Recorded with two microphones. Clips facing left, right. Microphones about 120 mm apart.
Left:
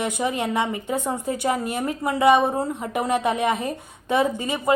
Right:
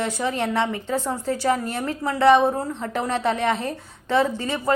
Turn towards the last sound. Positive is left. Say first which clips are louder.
# left 1 dB
turn(degrees=15)  # may be behind; listen again after turning